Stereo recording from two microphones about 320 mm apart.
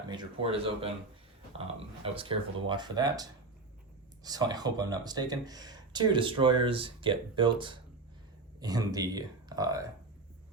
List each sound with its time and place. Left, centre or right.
0.1 s speech: centre
2.1 s speech: centre